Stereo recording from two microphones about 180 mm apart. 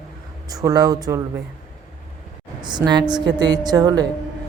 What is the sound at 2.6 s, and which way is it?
A woman's voice, 25° right (ahead or behind).